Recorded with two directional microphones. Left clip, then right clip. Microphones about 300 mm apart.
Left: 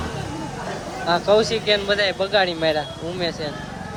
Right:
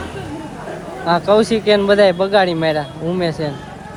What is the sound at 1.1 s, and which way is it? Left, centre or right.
Speech, centre.